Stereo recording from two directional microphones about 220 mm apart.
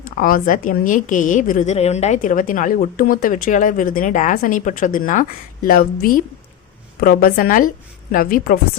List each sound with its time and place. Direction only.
0.2 s a woman's voice: 40° left (ahead or behind)